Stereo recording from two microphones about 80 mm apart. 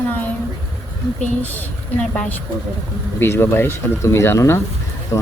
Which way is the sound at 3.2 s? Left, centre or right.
Left.